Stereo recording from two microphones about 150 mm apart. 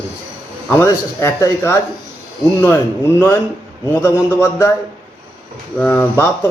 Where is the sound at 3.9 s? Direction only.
15° left (ahead or behind).